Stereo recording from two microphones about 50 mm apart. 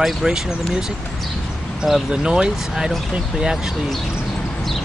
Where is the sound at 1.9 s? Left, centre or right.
Centre.